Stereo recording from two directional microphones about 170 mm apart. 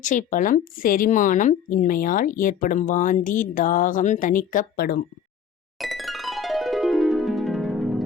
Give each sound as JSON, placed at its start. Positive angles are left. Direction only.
{"t": 0.0, "sound": "speech", "side_deg": 50}
{"t": 5.8, "sound": "music", "side_deg": 0}